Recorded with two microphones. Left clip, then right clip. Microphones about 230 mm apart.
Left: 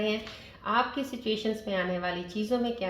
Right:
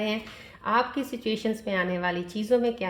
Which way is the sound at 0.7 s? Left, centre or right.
Right.